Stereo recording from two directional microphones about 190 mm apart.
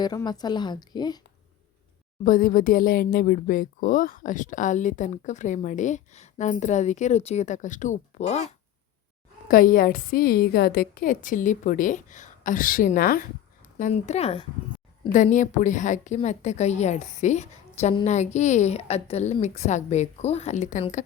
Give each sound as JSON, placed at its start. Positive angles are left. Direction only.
{"t": 0.0, "sound": "a woman's voice", "side_deg": 20}
{"t": 2.2, "sound": "speech", "side_deg": 45}
{"t": 9.5, "sound": "a woman's voice", "side_deg": 45}